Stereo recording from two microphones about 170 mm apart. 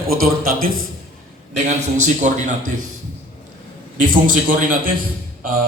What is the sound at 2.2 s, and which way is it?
Speech, 45° right (ahead or behind).